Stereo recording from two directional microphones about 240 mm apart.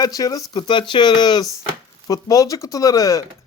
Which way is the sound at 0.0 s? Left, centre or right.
Centre.